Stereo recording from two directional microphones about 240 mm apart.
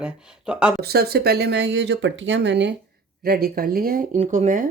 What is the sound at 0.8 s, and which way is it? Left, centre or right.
Speech, right.